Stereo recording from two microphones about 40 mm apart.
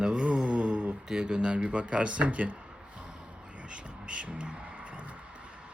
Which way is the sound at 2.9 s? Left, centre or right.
Right.